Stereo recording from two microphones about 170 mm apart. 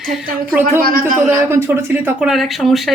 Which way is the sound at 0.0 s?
Centre (ahead or behind).